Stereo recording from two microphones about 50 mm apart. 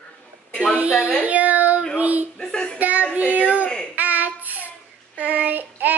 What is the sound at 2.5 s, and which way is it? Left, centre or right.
Speech, centre.